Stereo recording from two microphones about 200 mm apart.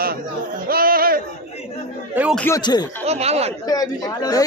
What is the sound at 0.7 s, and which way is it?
Speech, 45° right (ahead or behind).